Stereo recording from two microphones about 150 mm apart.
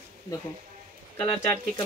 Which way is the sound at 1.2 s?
15° left (ahead or behind).